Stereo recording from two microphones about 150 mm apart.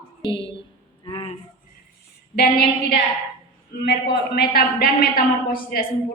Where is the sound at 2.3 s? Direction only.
90° left.